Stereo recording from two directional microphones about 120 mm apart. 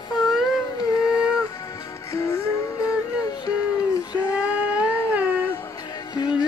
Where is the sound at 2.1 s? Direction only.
25° left (ahead or behind).